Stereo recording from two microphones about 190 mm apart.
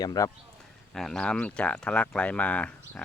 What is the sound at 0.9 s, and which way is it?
Speech, centre (ahead or behind).